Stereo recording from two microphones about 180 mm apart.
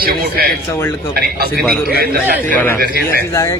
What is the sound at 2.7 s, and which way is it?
Speech, 55° right (ahead or behind).